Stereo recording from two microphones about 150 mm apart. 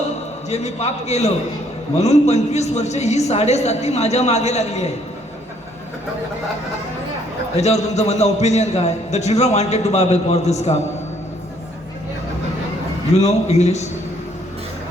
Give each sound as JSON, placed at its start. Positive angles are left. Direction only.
{"t": 0.5, "sound": "a man's voice", "side_deg": 45}
{"t": 7.5, "sound": "a man's voice", "side_deg": 45}
{"t": 13.1, "sound": "a man's voice", "side_deg": 45}